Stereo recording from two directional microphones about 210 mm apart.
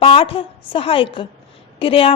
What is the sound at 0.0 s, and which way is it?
A woman's voice, 25° left (ahead or behind).